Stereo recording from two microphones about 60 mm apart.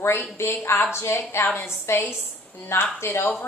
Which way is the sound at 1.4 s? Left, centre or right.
Left.